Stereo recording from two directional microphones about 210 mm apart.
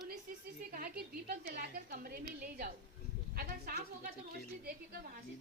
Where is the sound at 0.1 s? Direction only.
40° right (ahead or behind).